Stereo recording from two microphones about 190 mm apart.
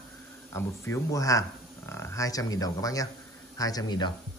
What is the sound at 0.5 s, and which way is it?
Speech, 15° left (ahead or behind).